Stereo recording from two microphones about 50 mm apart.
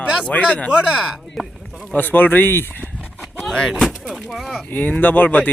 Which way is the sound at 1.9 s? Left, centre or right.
Left.